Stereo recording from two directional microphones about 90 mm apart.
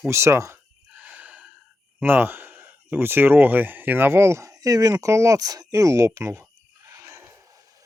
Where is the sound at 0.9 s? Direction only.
15° right (ahead or behind).